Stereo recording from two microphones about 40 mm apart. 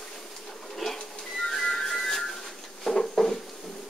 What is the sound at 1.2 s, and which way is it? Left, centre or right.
Whistling, centre.